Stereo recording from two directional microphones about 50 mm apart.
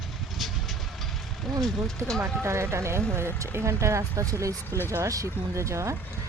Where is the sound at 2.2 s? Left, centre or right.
Right.